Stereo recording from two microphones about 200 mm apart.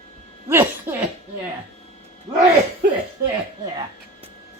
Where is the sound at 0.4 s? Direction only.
10° right (ahead or behind).